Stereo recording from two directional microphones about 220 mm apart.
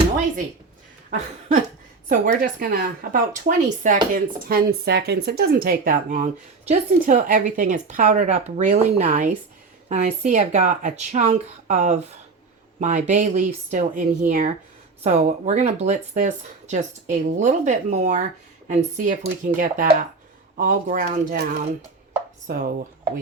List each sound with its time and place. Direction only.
2.0 s speech: 40° right (ahead or behind)